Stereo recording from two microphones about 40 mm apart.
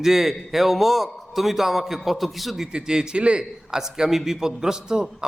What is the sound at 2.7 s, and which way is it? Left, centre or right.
A man's voice, centre.